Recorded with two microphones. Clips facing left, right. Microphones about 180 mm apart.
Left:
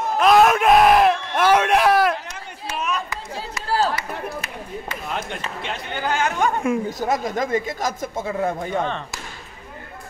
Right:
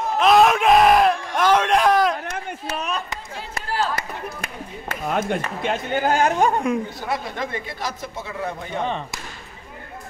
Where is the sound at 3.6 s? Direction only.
35° left (ahead or behind).